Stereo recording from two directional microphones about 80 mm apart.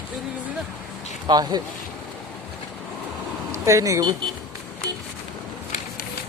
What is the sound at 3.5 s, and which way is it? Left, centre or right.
Speech, right.